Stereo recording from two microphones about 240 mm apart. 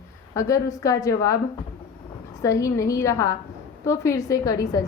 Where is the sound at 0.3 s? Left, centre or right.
Centre.